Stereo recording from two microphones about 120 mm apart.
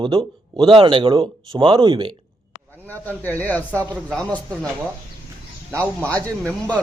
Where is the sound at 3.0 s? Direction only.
15° left (ahead or behind).